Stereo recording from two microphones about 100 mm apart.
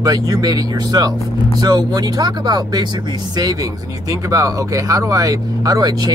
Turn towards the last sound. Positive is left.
turn(degrees=-40)  # may be behind; listen again after turning